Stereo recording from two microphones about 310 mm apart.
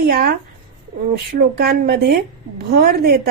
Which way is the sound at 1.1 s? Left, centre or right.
Right.